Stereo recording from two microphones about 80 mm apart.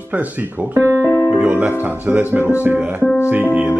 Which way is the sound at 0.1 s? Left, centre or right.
Right.